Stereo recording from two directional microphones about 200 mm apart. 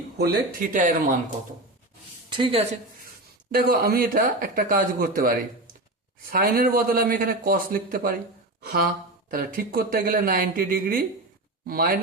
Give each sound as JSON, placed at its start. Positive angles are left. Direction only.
{"t": 0.2, "sound": "speech", "side_deg": -45}
{"t": 2.3, "sound": "a woman's voice", "side_deg": -25}
{"t": 3.5, "sound": "speech", "side_deg": -50}